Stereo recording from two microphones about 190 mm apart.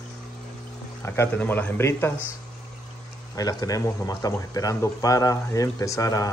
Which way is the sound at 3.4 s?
20° left (ahead or behind).